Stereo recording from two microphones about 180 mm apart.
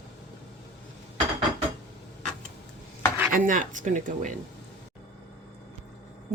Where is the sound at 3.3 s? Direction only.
45° right (ahead or behind).